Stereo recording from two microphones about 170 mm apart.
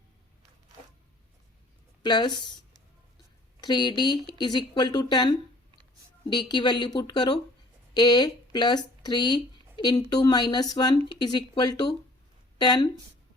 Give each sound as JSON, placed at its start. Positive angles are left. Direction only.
{"t": 2.0, "sound": "speech", "side_deg": 25}
{"t": 3.6, "sound": "speech", "side_deg": 25}
{"t": 6.3, "sound": "speech", "side_deg": 25}